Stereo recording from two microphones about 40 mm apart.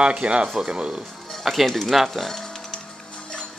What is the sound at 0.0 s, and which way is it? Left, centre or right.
Speech, right.